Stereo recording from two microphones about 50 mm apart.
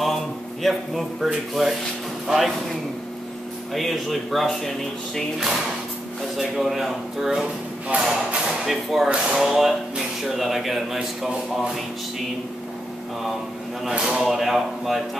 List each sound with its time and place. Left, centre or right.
0.0 s a man's voice: centre
3.7 s speech: centre
6.3 s speech: centre
7.9 s speech: right
8.6 s speech: centre
13.9 s speech: centre
14.2 s speech: centre